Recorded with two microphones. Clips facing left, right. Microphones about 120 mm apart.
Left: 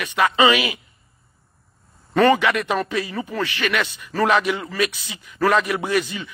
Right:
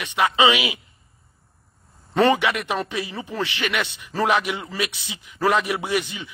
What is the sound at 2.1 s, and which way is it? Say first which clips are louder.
A man's voice: left 2 dB; 20° right (ahead or behind).